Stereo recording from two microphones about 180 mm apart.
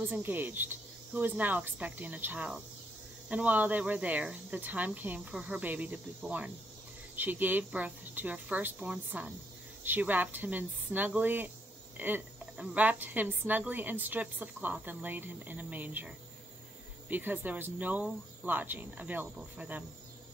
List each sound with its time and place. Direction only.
0.0 s a woman's voice: 10° right (ahead or behind)
17.1 s a woman's voice: 10° right (ahead or behind)